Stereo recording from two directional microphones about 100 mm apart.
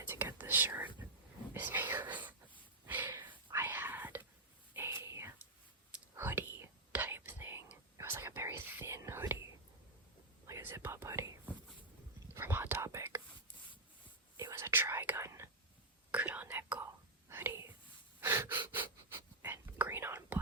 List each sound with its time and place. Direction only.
0.0 s whispering: 20° right (ahead or behind)
2.0 s wail: 15° right (ahead or behind)
3.1 s whispering: 25° right (ahead or behind)
10.4 s whispering: 30° right (ahead or behind)
14.5 s whispering: 25° right (ahead or behind)
18.2 s gasp: 25° right (ahead or behind)
19.4 s whispering: 20° right (ahead or behind)